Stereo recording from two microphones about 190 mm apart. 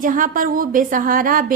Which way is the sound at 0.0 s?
45° right (ahead or behind).